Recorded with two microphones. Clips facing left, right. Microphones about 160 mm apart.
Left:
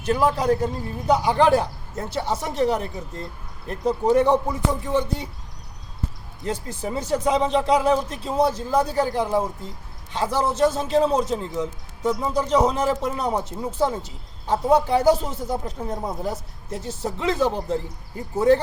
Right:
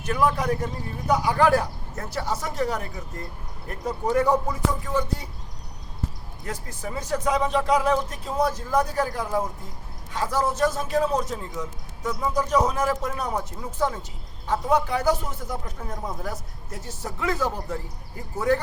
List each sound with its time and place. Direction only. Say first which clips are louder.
0.0 s a man's voice: left 3 dB; 30° left (ahead or behind)
6.4 s a man's voice: left 6 dB; 25° left (ahead or behind)